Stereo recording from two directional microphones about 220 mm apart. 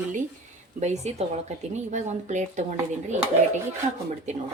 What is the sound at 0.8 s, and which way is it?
A woman's voice, 30° right (ahead or behind).